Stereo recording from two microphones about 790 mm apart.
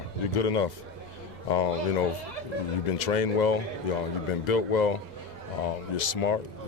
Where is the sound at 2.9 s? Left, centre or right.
Left.